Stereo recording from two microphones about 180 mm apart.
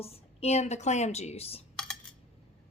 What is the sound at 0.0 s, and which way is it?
A woman's voice, 35° left (ahead or behind).